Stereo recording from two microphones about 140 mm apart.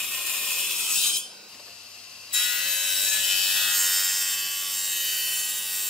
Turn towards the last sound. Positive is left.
turn(degrees=0)  # may be behind; listen again after turning